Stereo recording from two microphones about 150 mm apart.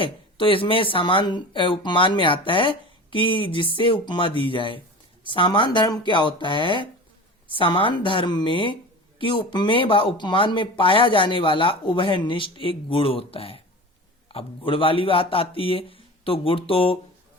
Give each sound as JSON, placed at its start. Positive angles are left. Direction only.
{"t": 0.0, "sound": "speech", "side_deg": 35}